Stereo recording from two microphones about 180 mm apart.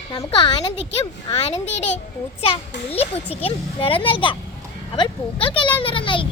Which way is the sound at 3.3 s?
30° left (ahead or behind).